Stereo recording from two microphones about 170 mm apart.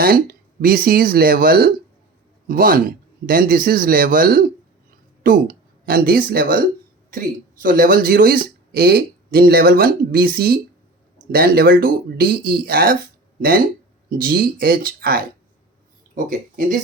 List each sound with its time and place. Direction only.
0.0 s speech: 60° right (ahead or behind)
14.1 s speech: 60° right (ahead or behind)